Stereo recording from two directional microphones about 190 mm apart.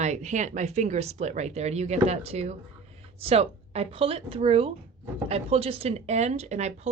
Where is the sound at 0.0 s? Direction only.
35° right (ahead or behind).